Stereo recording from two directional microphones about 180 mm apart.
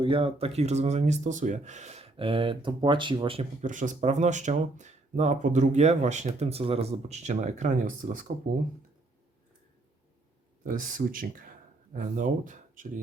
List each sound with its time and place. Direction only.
0.0 s speech: 30° right (ahead or behind)
3.6 s speech: 45° right (ahead or behind)
10.6 s speech: 50° right (ahead or behind)